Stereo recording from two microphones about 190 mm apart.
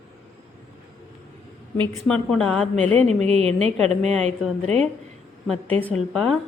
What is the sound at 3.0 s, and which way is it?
Speech, 35° right (ahead or behind).